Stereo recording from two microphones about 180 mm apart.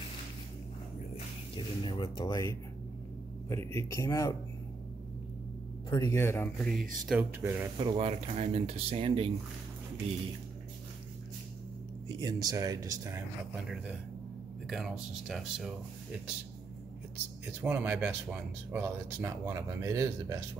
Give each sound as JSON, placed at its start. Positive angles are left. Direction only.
{"t": 1.1, "sound": "speech", "side_deg": 30}
{"t": 5.9, "sound": "speech", "side_deg": 15}
{"t": 7.1, "sound": "speech", "side_deg": -10}
{"t": 7.7, "sound": "speech", "side_deg": -30}
{"t": 12.2, "sound": "speech", "side_deg": -20}
{"t": 14.7, "sound": "speech", "side_deg": -5}
{"t": 17.5, "sound": "speech", "side_deg": -10}